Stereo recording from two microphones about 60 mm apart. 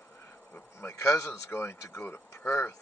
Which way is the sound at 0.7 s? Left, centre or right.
Left.